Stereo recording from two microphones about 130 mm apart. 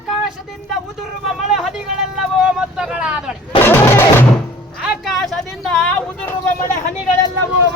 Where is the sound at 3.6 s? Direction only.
15° left (ahead or behind).